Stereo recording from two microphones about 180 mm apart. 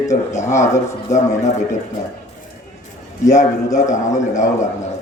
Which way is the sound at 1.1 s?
20° left (ahead or behind).